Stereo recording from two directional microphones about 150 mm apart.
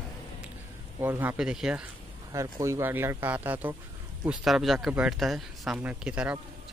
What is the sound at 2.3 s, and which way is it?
Speech, 20° right (ahead or behind).